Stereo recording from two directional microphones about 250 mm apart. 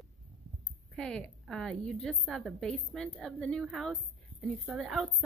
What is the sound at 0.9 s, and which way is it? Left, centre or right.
A woman's voice, centre.